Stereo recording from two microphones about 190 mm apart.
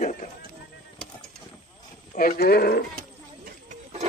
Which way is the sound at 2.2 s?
50° left (ahead or behind).